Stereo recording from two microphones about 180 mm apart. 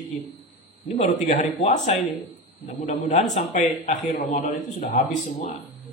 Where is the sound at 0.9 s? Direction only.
40° left (ahead or behind).